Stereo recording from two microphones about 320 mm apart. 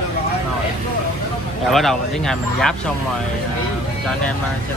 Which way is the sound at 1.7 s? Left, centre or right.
Centre.